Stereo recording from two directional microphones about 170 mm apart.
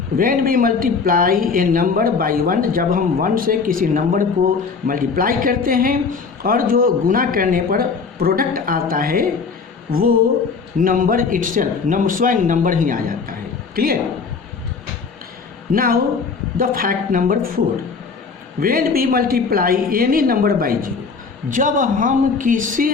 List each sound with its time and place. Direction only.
0.2 s a man's voice: 55° right (ahead or behind)
15.7 s speech: 60° right (ahead or behind)
18.6 s a man's voice: 60° right (ahead or behind)